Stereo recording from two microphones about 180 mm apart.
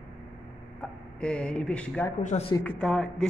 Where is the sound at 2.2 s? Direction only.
40° left (ahead or behind).